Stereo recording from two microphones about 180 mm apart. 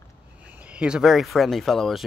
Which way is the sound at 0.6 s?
5° right (ahead or behind).